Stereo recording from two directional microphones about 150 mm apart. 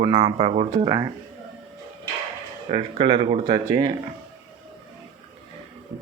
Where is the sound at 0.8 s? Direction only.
25° right (ahead or behind).